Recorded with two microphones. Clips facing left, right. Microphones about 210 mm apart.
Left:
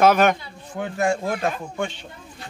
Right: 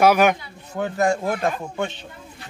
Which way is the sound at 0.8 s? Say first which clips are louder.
Right 2 dB; 40° right (ahead or behind).